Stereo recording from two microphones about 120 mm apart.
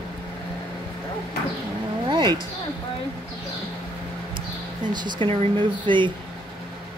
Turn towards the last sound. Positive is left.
turn(degrees=-45)  # may be behind; listen again after turning